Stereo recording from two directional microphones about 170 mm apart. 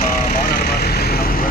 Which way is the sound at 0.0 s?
50° left (ahead or behind).